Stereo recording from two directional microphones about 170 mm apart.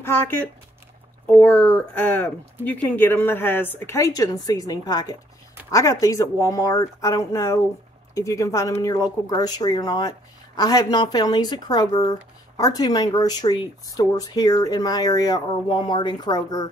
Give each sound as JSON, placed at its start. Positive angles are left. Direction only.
{"t": 0.0, "sound": "a woman's voice", "side_deg": 15}